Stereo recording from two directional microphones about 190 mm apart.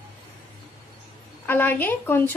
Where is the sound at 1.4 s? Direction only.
10° left (ahead or behind).